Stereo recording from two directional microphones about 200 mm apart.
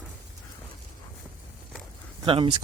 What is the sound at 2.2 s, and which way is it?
Speech, 25° right (ahead or behind).